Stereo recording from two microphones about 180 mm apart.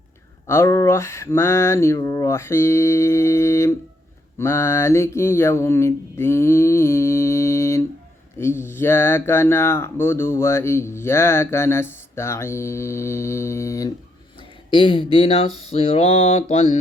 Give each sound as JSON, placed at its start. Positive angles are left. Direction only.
{"t": 0.4, "sound": "speech", "side_deg": 15}